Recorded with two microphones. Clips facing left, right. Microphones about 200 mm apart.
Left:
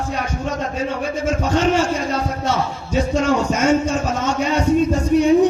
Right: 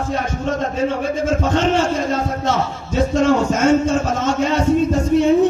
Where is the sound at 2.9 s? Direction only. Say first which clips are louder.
Right 2 dB; 10° left (ahead or behind).